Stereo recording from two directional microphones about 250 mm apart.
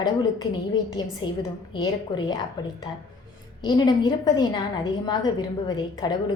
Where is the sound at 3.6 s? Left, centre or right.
Centre.